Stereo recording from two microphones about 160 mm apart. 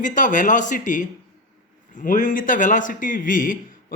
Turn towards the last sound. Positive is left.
turn(degrees=60)  # may be behind; listen again after turning